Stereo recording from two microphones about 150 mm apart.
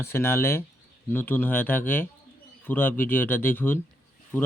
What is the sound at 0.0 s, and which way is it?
Speech, 15° left (ahead or behind).